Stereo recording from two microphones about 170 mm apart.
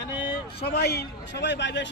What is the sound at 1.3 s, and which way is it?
Speech, 90° left.